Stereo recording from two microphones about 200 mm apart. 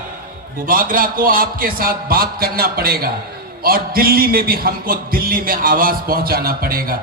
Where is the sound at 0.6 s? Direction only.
45° right (ahead or behind).